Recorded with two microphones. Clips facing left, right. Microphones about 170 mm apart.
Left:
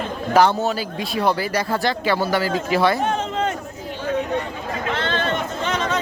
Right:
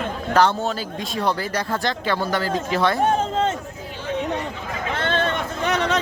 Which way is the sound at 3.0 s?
30° right (ahead or behind).